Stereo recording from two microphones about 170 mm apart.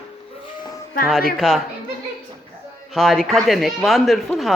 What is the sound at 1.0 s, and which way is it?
Speech, 50° left (ahead or behind).